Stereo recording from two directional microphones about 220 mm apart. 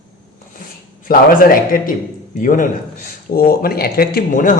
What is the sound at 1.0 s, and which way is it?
A woman's voice, 40° left (ahead or behind).